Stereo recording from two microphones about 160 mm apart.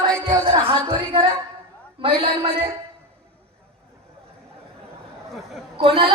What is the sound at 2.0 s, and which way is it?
Music, 35° right (ahead or behind).